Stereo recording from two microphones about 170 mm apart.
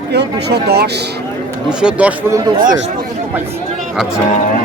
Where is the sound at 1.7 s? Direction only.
5° right (ahead or behind).